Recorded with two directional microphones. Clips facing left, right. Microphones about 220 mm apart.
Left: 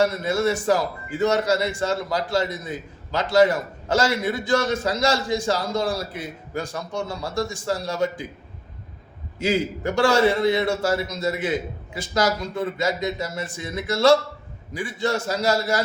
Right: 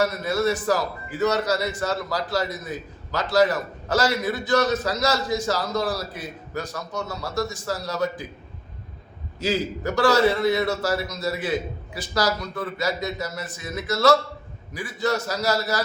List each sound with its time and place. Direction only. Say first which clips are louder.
0.0 s a man's voice: left 2 dB; 25° left (ahead or behind)
9.8 s a man's voice: even; 25° left (ahead or behind)